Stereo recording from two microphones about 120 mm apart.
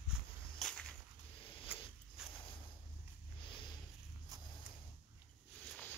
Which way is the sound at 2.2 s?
5° right (ahead or behind).